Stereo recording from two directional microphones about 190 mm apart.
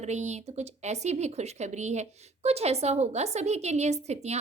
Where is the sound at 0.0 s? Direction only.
35° right (ahead or behind).